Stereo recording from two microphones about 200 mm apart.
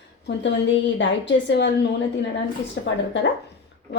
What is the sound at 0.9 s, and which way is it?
Speech, 65° left (ahead or behind).